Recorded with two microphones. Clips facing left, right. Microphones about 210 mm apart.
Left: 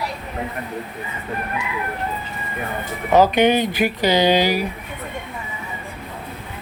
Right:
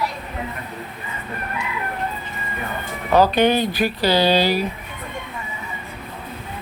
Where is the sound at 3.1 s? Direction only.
15° left (ahead or behind).